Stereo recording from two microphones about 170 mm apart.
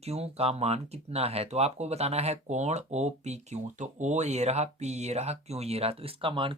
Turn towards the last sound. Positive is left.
turn(degrees=-30)  # may be behind; listen again after turning